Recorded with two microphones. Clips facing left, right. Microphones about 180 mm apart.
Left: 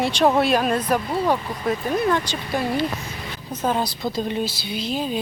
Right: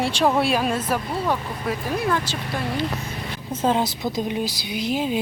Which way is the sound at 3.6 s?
20° right (ahead or behind).